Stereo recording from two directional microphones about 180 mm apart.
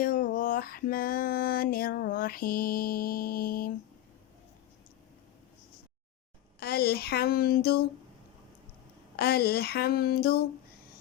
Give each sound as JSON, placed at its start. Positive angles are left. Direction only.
{"t": 0.0, "sound": "a sound", "side_deg": 50}
{"t": 6.6, "sound": "speech", "side_deg": 60}
{"t": 9.1, "sound": "speech", "side_deg": 60}